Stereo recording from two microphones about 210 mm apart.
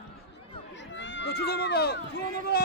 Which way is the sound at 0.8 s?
60° left (ahead or behind).